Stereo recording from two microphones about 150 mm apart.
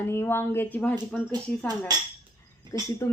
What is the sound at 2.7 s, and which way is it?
Speech, 20° left (ahead or behind).